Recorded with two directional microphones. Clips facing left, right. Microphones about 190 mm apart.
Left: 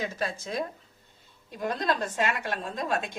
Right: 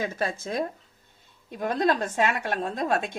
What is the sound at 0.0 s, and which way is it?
A woman's voice, 55° right (ahead or behind).